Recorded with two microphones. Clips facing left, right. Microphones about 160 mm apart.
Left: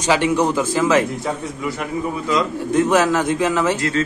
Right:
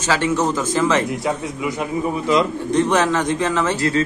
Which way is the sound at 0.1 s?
15° left (ahead or behind).